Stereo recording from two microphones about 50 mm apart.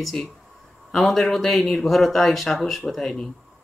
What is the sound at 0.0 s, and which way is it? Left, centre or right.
Speech, centre.